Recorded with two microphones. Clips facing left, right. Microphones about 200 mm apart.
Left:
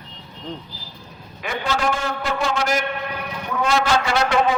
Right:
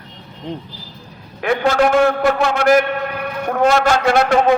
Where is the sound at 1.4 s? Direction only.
60° right (ahead or behind).